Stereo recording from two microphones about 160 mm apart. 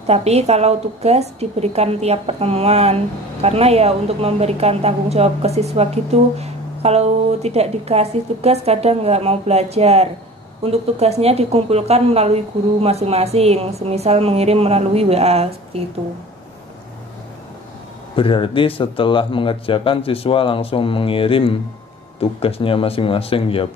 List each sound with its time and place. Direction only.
0.0 s speech: 40° right (ahead or behind)
18.1 s a man's voice: 35° left (ahead or behind)